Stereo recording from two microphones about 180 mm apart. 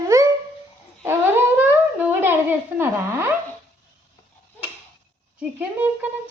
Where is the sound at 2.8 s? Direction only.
10° right (ahead or behind).